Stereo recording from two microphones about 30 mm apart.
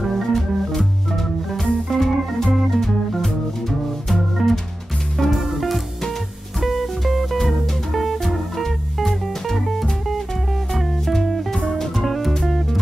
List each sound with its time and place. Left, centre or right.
0.0 s organ: centre
0.7 s music: centre
2.7 s organ: centre
4.1 s music: centre
5.4 s music: centre